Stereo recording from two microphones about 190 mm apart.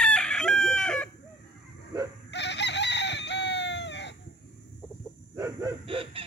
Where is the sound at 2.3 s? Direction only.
65° left (ahead or behind).